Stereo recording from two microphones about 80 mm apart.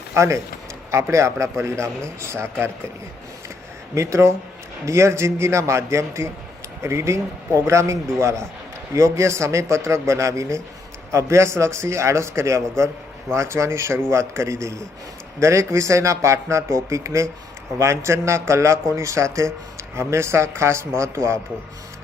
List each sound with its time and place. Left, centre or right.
0.1 s speech: right
3.9 s speech: right